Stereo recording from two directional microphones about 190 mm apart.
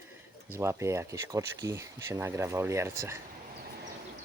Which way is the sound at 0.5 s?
15° right (ahead or behind).